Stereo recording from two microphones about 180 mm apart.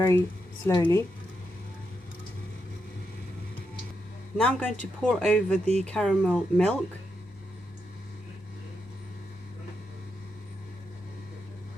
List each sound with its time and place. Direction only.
0.0 s speech: 15° left (ahead or behind)
4.4 s speech: 5° left (ahead or behind)